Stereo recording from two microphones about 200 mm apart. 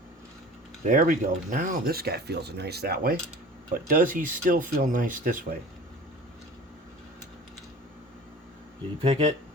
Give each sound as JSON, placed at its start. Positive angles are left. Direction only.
{"t": 0.9, "sound": "speech", "side_deg": -40}
{"t": 9.0, "sound": "speech", "side_deg": -30}